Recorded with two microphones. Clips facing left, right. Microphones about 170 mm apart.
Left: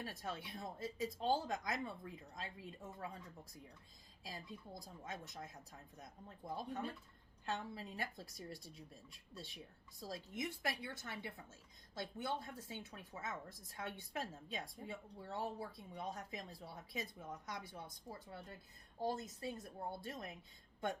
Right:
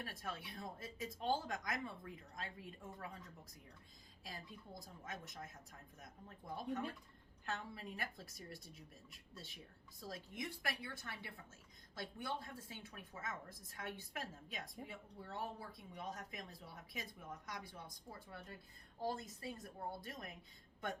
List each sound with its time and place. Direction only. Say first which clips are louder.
0.0 s a woman's voice: left 2 dB; 25° left (ahead or behind)
4.2 s a woman's voice: left 2 dB; 25° left (ahead or behind)
8.5 s speech: left 1 dB; 25° right (ahead or behind)
10.0 s a woman's voice: left 3 dB; 25° left (ahead or behind)